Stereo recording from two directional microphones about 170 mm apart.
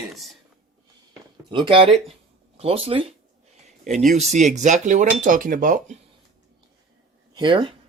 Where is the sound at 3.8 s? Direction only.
45° right (ahead or behind).